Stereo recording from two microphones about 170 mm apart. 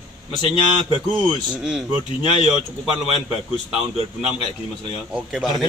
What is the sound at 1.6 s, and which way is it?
Speech, 5° right (ahead or behind).